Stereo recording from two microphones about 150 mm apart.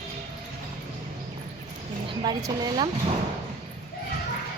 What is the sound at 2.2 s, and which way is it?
Speech, 25° right (ahead or behind).